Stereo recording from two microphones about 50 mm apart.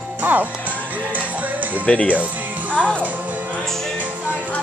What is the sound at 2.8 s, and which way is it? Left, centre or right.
Speech, left.